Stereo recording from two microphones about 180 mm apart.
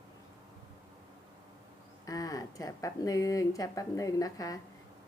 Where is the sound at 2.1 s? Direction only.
20° left (ahead or behind).